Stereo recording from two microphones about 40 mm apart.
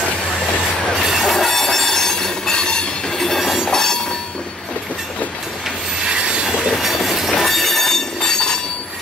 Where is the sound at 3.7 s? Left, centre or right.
Centre.